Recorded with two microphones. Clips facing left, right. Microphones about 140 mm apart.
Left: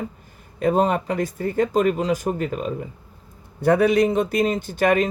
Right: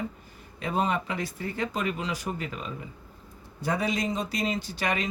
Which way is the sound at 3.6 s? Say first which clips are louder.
Left 12 dB; 60° left (ahead or behind).